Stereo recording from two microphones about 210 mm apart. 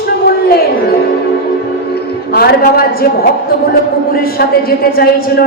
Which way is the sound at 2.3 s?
45° left (ahead or behind).